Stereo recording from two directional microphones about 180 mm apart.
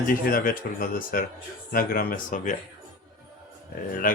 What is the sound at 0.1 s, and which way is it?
Speech, 50° left (ahead or behind).